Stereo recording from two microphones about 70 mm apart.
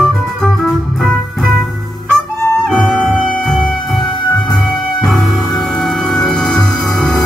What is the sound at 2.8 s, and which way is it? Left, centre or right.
Music, centre.